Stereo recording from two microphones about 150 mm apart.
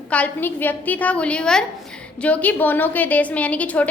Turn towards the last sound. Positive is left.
turn(degrees=10)  # may be behind; listen again after turning